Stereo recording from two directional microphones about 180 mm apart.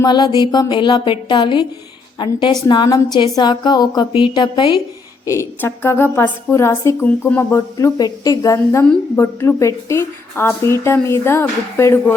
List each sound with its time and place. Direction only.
0.0 s a woman's voice: 25° left (ahead or behind)